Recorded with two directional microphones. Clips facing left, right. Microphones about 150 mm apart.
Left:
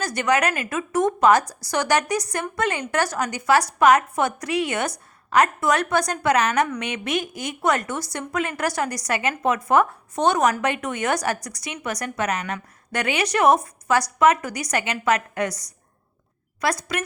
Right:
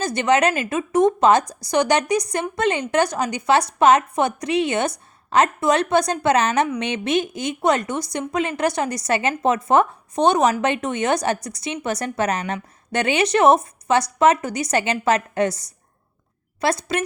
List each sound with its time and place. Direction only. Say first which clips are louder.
0.0 s a woman's voice: right 3 dB; 25° right (ahead or behind)